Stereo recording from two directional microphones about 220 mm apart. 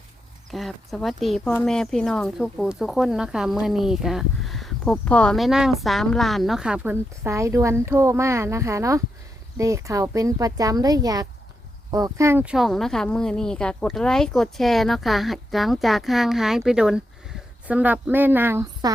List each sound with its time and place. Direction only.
0.5 s speech: centre (ahead or behind); by 18.9 s 15° right (ahead or behind)